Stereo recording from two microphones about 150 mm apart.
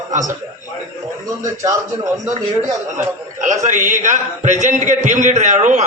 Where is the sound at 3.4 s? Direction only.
55° right (ahead or behind).